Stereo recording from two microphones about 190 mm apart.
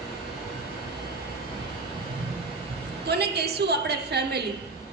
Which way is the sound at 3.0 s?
60° right (ahead or behind).